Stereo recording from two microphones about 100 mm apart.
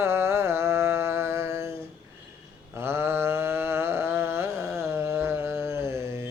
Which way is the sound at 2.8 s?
25° right (ahead or behind).